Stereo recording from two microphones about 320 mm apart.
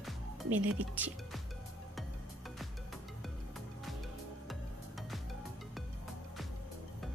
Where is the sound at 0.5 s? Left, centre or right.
Centre.